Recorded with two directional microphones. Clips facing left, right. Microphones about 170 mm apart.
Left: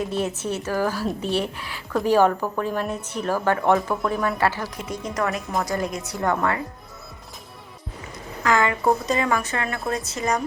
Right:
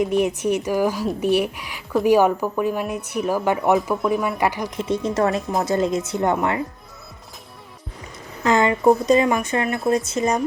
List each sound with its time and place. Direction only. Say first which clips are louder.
0.0 s speech: right 6 dB; 15° right (ahead or behind)
3.8 s speech: right 3 dB; centre (ahead or behind)
4.1 s speech: right 2 dB; 15° right (ahead or behind)
4.8 s speech: right 7 dB; 25° right (ahead or behind)
8.4 s speech: right 4 dB; 20° right (ahead or behind)